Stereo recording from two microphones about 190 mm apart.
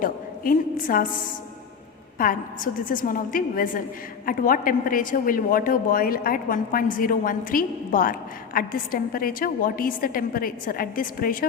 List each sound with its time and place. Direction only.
0.0 s a woman's voice: 45° left (ahead or behind)
2.1 s a woman's voice: 45° left (ahead or behind)